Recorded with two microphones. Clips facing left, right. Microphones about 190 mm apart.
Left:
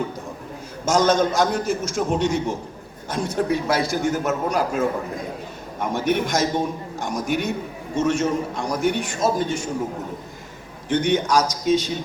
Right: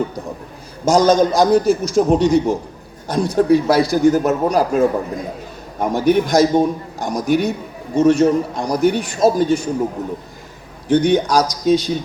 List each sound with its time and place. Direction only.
0.9 s speech: 35° right (ahead or behind)
10.8 s speech: 35° right (ahead or behind)